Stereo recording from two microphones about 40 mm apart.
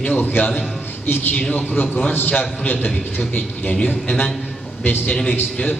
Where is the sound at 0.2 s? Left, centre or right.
Left.